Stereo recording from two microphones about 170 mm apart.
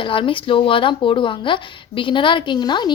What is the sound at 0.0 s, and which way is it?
Speech, 30° left (ahead or behind).